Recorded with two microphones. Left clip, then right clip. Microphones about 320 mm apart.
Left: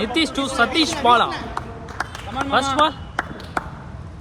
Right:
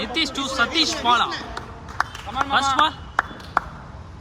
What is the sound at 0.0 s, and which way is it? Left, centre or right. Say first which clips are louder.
Speech: left 3 dB; centre.